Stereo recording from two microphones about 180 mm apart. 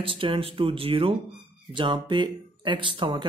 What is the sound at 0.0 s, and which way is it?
Speech, 30° right (ahead or behind).